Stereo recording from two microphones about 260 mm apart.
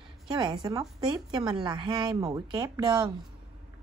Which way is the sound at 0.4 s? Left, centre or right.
Centre.